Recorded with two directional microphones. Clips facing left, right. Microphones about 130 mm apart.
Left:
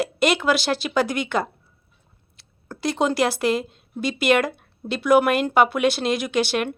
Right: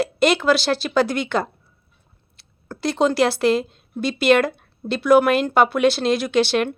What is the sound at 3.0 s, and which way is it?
Speech, 15° left (ahead or behind).